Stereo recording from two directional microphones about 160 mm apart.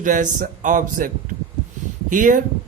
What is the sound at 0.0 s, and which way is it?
Speech, 55° right (ahead or behind).